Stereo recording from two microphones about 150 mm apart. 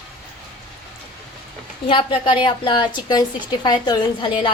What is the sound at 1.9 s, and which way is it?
A woman's voice, 35° left (ahead or behind).